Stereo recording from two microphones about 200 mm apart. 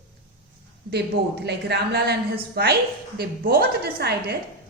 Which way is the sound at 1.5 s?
55° right (ahead or behind).